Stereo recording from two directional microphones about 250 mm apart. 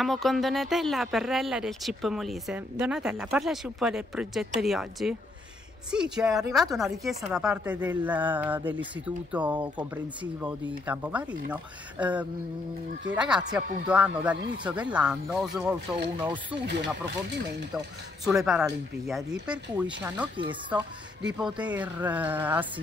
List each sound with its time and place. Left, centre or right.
0.0 s speech: centre
18.3 s speech: centre
20.3 s speech: centre
21.3 s speech: centre